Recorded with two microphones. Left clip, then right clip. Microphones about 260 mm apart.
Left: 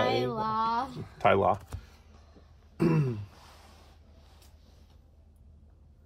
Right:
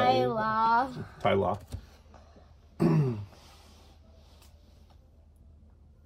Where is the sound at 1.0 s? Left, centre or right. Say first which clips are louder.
Left 3 dB; centre.